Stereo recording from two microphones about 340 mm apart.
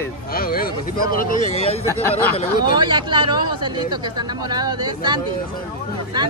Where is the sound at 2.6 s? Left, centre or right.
Centre.